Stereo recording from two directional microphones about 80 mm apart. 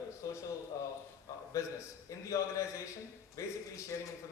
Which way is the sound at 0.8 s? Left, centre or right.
Left.